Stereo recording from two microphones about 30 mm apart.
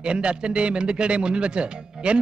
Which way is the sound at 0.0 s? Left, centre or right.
Right.